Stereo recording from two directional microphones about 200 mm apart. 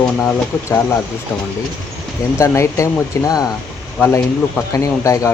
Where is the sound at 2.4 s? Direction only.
15° left (ahead or behind).